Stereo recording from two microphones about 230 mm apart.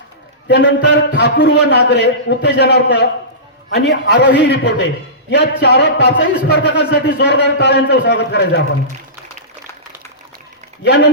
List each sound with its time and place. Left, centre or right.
0.4 s a man's voice: left
10.8 s a man's voice: left